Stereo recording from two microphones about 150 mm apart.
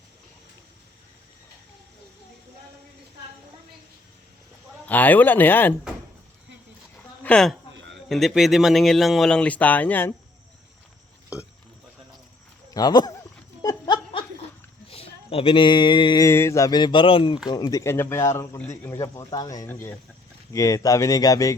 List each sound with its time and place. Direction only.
4.9 s speech: 10° left (ahead or behind)
7.2 s a sound: 5° left (ahead or behind)
8.1 s speech: centre (ahead or behind)
12.7 s speech: 30° left (ahead or behind)
13.6 s laughter: 25° left (ahead or behind)
14.8 s speech: 40° left (ahead or behind); by 21.5 s 25° left (ahead or behind)